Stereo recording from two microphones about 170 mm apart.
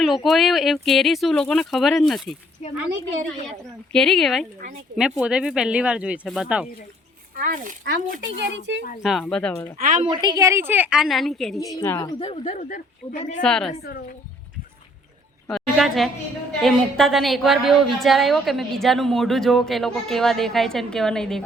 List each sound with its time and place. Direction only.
0.0 s a woman's voice: centre (ahead or behind)
3.9 s a woman's voice: 5° left (ahead or behind)
7.3 s speech: 50° right (ahead or behind)
8.4 s speech: 90° right
9.0 s a woman's voice: centre (ahead or behind)
9.7 s speech: 50° right (ahead or behind)
10.1 s a woman's voice: 25° right (ahead or behind); by 11.7 s centre (ahead or behind)
11.7 s speech: 20° left (ahead or behind)
12.2 s speech: 35° left (ahead or behind); by 13.1 s 55° left (ahead or behind)
13.4 s a woman's voice: 5° left (ahead or behind)
15.4 s a woman's voice: centre (ahead or behind)